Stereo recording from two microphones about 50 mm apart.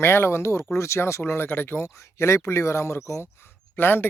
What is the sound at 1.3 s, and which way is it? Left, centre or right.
Speech, left.